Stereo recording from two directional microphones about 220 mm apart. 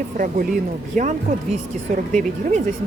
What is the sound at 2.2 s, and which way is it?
Speech, 35° right (ahead or behind).